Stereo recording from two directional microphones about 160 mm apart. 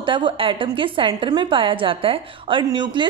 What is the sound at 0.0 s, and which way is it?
Speech, 30° right (ahead or behind).